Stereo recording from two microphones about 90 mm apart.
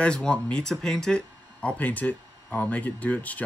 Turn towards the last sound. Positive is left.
turn(degrees=15)  # may be behind; listen again after turning